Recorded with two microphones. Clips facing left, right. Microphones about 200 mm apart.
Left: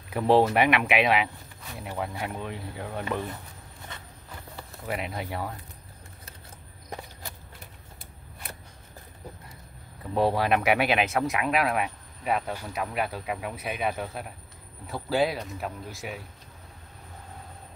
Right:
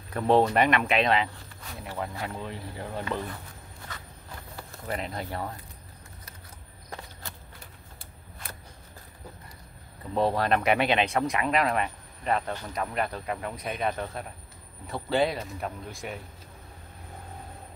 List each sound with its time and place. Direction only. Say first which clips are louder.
0.1 s speech: left 1 dB; 5° left (ahead or behind)
2.4 s speech: left 1 dB; centre (ahead or behind)
3.0 s speech: left 1 dB; 15° left (ahead or behind)
4.8 s speech: left 1 dB; 10° left (ahead or behind)
10.1 s speech: left 1 dB; 5° left (ahead or behind)